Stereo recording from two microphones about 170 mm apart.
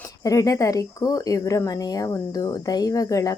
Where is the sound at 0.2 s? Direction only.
20° left (ahead or behind).